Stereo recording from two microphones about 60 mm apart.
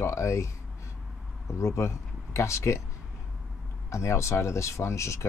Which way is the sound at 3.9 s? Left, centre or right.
Left.